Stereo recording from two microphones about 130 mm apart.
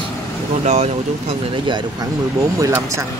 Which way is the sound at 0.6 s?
55° right (ahead or behind).